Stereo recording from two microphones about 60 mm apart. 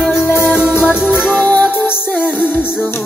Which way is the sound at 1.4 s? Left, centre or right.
Left.